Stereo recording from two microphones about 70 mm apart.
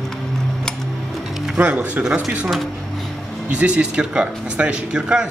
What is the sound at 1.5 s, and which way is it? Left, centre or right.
Speech, right.